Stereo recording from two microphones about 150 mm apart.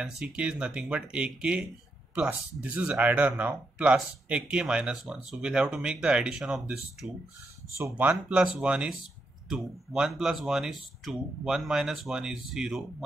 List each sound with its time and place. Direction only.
0.0 s speech: 5° right (ahead or behind)
7.7 s speech: 15° right (ahead or behind)